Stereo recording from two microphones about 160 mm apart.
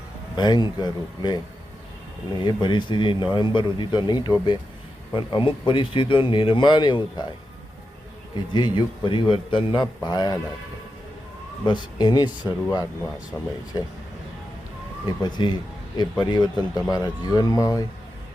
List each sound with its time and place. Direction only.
0.3 s speech: 25° left (ahead or behind)
2.4 s speech: 30° left (ahead or behind)
8.5 s speech: 30° left (ahead or behind)
11.6 s speech: 25° left (ahead or behind)
15.0 s speech: 30° left (ahead or behind)